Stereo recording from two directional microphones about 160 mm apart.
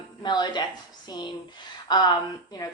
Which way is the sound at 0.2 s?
25° left (ahead or behind).